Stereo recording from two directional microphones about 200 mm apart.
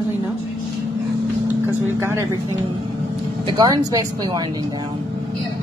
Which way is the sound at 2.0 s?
15° right (ahead or behind).